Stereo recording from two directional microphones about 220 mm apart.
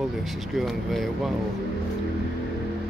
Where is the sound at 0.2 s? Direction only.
Centre (ahead or behind).